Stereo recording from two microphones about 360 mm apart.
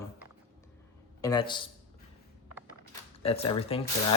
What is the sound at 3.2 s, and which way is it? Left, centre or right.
Speech, centre.